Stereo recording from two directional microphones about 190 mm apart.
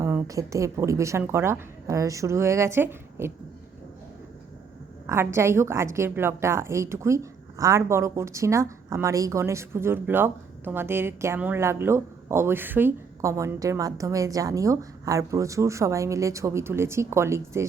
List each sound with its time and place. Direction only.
0.0 s a woman's voice: 15° right (ahead or behind)
5.0 s a woman's voice: 15° right (ahead or behind)